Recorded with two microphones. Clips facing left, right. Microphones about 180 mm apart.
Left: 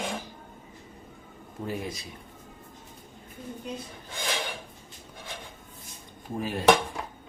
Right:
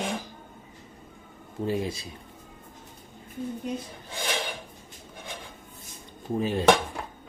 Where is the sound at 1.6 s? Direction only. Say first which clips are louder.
Right 5 dB; 25° right (ahead or behind).